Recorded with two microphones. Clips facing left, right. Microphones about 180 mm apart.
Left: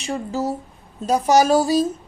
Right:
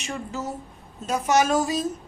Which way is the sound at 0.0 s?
35° left (ahead or behind).